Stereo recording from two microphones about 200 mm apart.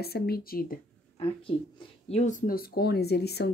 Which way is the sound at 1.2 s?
30° left (ahead or behind).